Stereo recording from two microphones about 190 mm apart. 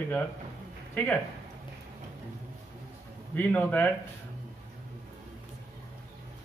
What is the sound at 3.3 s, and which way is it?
Speech, 10° left (ahead or behind).